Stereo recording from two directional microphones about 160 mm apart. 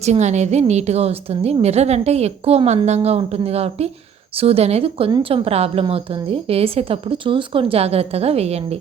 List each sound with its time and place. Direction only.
0.0 s a woman's voice: 45° right (ahead or behind)